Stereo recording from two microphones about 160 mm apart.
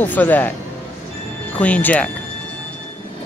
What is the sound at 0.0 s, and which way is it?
Speech, 10° left (ahead or behind).